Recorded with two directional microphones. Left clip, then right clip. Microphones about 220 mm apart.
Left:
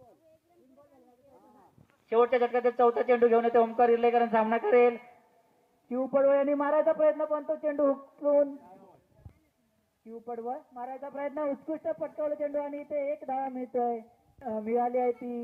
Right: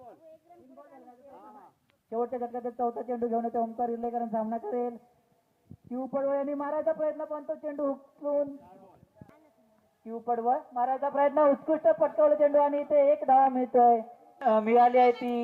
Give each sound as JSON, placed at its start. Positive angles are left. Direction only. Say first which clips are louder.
{"t": 2.0, "sound": "speech", "louder": "left 8 dB", "side_deg": -30}
{"t": 10.1, "sound": "speech", "louder": "right 9 dB", "side_deg": -45}